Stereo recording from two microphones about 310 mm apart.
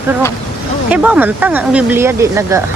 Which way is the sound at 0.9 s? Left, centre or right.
Centre.